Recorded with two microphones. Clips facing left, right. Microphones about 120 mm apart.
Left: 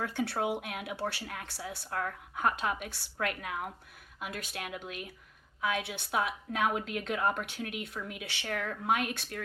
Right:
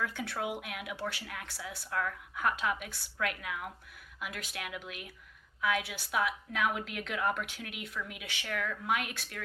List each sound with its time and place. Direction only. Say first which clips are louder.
0.0 s a woman's voice: left 4 dB; 30° left (ahead or behind)